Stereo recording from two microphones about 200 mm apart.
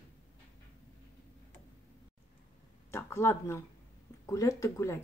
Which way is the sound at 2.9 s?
15° left (ahead or behind).